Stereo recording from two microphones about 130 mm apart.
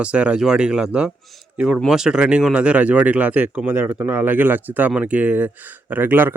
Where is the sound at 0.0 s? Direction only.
10° right (ahead or behind).